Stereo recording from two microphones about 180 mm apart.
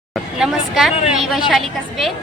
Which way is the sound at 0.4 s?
Centre (ahead or behind).